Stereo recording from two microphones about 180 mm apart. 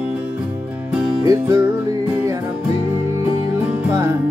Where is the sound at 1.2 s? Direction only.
15° right (ahead or behind).